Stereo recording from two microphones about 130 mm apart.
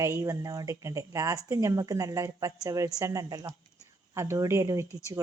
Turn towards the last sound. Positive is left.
turn(degrees=-25)  # may be behind; listen again after turning